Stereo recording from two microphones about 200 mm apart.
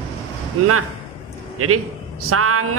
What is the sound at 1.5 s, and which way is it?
A man's voice, 90° right.